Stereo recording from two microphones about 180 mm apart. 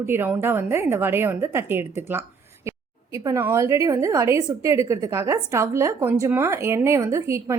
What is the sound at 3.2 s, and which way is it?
A woman's voice, 15° right (ahead or behind).